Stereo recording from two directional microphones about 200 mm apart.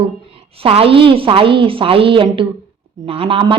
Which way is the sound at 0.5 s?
30° right (ahead or behind).